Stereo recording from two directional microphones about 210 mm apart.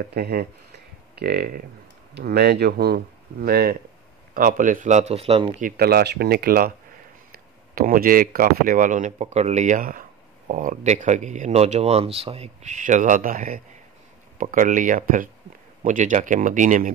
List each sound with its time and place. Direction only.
0.1 s speech: 45° right (ahead or behind); by 5.7 s 30° right (ahead or behind)
5.7 s speech: 45° right (ahead or behind)
7.7 s speech: 40° right (ahead or behind)